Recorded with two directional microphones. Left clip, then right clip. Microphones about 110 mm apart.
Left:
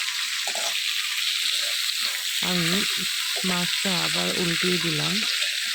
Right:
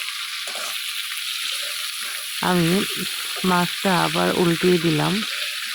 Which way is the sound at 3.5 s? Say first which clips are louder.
Right 8 dB; 55° right (ahead or behind).